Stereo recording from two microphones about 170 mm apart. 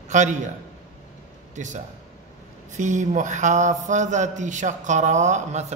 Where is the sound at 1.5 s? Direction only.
45° right (ahead or behind).